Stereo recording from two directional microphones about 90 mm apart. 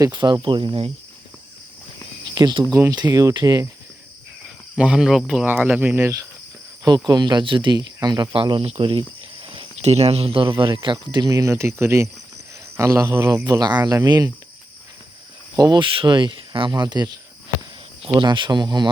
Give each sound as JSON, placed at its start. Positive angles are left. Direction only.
{"t": 0.1, "sound": "speech", "side_deg": -55}
{"t": 2.3, "sound": "speech", "side_deg": -50}
{"t": 4.8, "sound": "speech", "side_deg": -5}
{"t": 5.5, "sound": "speech", "side_deg": -20}
{"t": 6.8, "sound": "speech", "side_deg": -50}
{"t": 8.4, "sound": "cricket", "side_deg": -70}
{"t": 10.1, "sound": "speech", "side_deg": -90}
{"t": 10.8, "sound": "speech", "side_deg": -50}
{"t": 13.4, "sound": "speech", "side_deg": -50}
{"t": 15.5, "sound": "speech", "side_deg": -45}
{"t": 15.8, "sound": "speech", "side_deg": -65}
{"t": 18.0, "sound": "speech", "side_deg": -65}